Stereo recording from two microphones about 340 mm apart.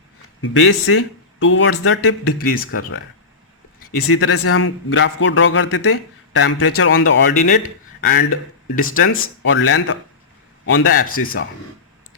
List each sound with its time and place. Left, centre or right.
0.4 s a man's voice: left
4.1 s a man's voice: left
10.9 s speech: left